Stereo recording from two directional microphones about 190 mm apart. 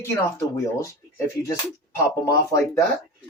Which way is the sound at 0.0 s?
15° left (ahead or behind).